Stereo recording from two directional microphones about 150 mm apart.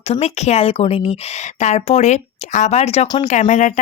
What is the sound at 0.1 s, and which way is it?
A woman's voice, 45° left (ahead or behind).